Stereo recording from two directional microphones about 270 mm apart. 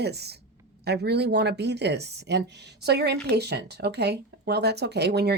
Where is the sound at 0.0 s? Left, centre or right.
Right.